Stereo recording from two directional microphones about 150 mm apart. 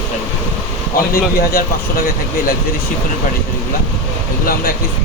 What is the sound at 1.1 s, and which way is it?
Speech, 80° left.